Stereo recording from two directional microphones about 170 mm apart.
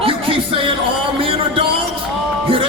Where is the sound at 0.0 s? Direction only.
30° right (ahead or behind).